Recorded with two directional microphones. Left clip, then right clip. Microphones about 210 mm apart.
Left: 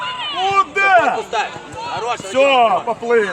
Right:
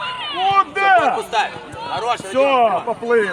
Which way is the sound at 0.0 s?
15° left (ahead or behind).